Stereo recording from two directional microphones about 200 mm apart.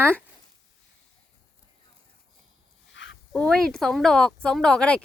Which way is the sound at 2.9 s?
65° left (ahead or behind).